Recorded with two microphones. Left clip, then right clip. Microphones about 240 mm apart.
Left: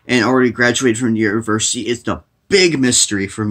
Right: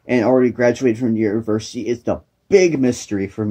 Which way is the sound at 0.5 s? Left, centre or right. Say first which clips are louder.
Left 2 dB; left.